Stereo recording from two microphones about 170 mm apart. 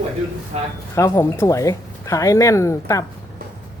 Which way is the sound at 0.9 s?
15° left (ahead or behind).